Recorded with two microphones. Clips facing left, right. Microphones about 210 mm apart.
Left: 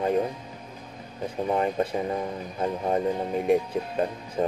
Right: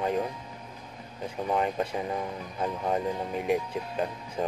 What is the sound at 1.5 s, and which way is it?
Speech, 40° left (ahead or behind).